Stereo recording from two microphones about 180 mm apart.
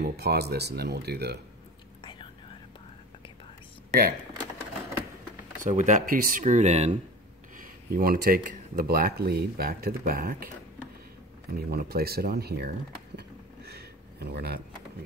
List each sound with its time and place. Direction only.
0.0 s speech: 65° right (ahead or behind)
5.6 s speech: 40° right (ahead or behind)
7.5 s speech: 50° right (ahead or behind)
11.5 s speech: 60° right (ahead or behind)
13.7 s a sound: 65° right (ahead or behind)